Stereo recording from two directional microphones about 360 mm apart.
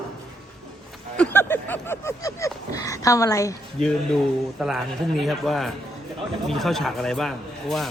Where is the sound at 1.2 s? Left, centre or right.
Centre.